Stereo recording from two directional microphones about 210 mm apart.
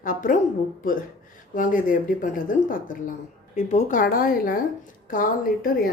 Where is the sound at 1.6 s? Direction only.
40° left (ahead or behind).